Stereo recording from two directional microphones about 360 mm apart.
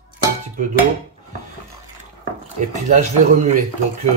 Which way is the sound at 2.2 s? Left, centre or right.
Right.